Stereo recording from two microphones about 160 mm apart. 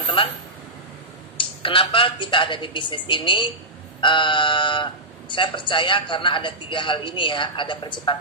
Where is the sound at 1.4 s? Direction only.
35° left (ahead or behind).